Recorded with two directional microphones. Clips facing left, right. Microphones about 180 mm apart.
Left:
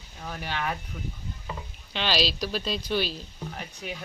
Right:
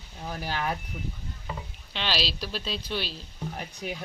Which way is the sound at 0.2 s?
10° right (ahead or behind).